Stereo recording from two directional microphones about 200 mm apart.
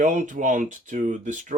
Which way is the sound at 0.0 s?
40° right (ahead or behind).